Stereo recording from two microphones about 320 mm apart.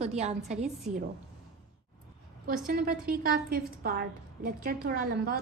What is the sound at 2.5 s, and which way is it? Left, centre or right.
A woman's voice, right.